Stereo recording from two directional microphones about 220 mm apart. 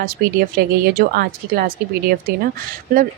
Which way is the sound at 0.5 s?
45° right (ahead or behind).